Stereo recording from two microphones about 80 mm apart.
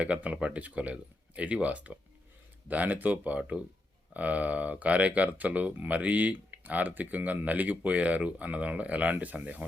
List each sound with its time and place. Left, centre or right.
0.0 s speech: centre